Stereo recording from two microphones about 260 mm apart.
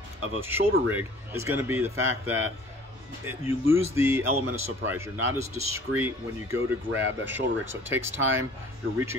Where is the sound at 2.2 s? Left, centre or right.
Right.